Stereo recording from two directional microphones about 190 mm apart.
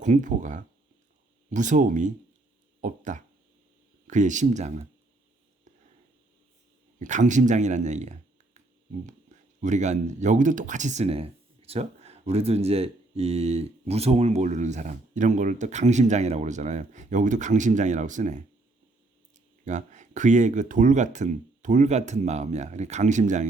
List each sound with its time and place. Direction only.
0.0 s speech: 40° right (ahead or behind)
7.0 s speech: 40° right (ahead or behind)
19.6 s speech: 40° right (ahead or behind)